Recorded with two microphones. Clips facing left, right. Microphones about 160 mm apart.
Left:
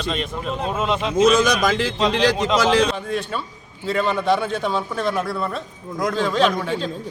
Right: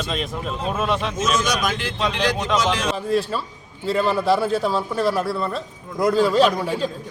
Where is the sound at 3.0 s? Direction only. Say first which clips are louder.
Right 4 dB; centre (ahead or behind).